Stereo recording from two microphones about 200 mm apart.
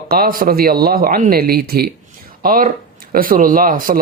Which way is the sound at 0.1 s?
45° right (ahead or behind).